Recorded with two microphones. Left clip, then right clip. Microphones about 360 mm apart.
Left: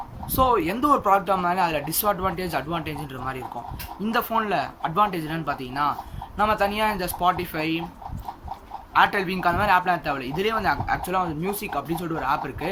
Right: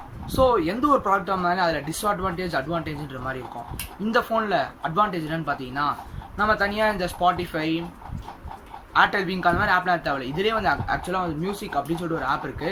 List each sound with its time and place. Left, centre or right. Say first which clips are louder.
0.3 s speech: right 1 dB; centre
8.9 s speech: even; centre